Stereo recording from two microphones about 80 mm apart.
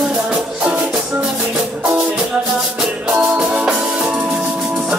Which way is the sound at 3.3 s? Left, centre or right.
Centre.